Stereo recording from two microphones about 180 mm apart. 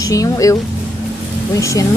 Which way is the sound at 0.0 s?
20° left (ahead or behind).